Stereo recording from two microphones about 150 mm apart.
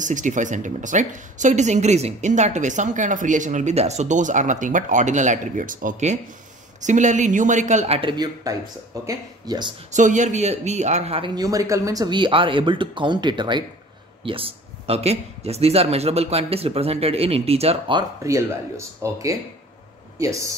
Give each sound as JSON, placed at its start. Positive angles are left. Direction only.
{"t": 0.0, "sound": "a woman's voice", "side_deg": -55}
{"t": 9.9, "sound": "speech", "side_deg": -55}
{"t": 18.2, "sound": "speech", "side_deg": -20}